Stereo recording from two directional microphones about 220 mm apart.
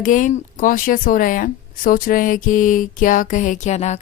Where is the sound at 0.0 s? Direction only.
35° left (ahead or behind).